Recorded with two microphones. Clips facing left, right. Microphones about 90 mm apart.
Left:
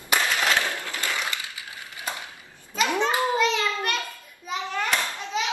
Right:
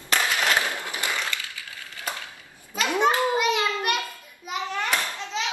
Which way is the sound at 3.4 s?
15° right (ahead or behind).